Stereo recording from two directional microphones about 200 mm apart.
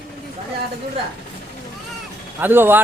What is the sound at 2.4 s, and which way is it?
Speech, 10° right (ahead or behind).